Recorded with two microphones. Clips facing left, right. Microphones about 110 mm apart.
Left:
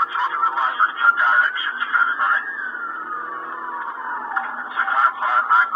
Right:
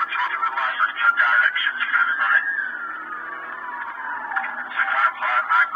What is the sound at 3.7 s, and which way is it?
Music, 25° left (ahead or behind).